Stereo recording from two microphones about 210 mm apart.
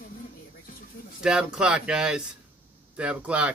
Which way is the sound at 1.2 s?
5° right (ahead or behind).